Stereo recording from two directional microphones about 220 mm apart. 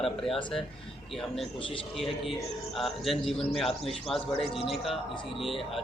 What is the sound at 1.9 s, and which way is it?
A man's voice, centre (ahead or behind).